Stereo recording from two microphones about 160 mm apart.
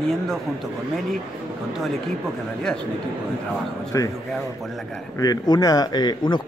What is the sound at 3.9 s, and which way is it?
Speech, 20° left (ahead or behind).